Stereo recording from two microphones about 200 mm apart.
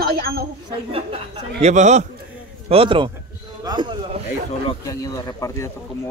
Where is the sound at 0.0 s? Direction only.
50° right (ahead or behind).